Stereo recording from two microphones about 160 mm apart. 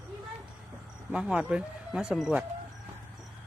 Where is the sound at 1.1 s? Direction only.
5° right (ahead or behind).